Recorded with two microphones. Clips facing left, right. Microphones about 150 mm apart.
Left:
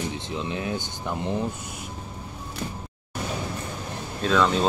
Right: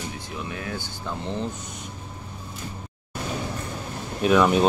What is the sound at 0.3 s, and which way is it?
Speech, 20° left (ahead or behind).